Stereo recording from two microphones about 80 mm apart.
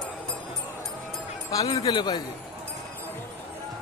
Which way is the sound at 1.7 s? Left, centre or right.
Left.